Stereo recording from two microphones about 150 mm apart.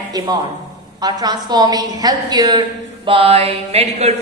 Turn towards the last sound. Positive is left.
turn(degrees=-45)  # may be behind; listen again after turning